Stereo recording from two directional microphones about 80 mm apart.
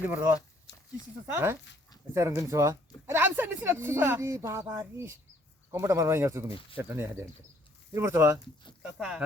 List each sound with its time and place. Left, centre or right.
0.0 s speech: right
1.3 s speech: right
3.1 s speech: right
8.8 s speech: centre